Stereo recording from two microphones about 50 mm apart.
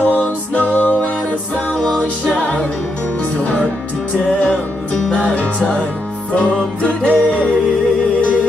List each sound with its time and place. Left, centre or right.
0.0 s music: left
2.0 s music: left
5.1 s music: left